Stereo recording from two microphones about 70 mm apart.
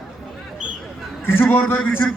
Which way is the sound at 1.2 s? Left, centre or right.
Left.